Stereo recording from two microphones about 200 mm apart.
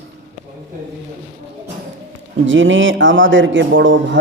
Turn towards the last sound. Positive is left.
turn(degrees=-65)  # may be behind; listen again after turning